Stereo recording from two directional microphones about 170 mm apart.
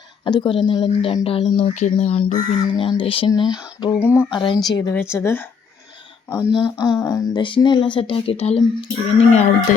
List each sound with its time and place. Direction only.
0.3 s speech: 30° left (ahead or behind)
4.3 s speech: 30° left (ahead or behind)
6.5 s speech: 25° left (ahead or behind)